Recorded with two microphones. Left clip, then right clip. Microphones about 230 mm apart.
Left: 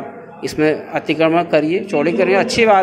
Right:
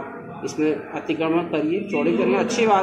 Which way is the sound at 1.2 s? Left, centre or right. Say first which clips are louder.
Left 9 dB; left.